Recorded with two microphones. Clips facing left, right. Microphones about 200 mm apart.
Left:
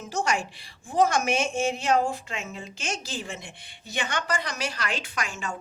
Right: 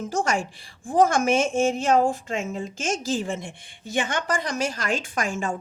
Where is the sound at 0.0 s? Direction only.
50° right (ahead or behind).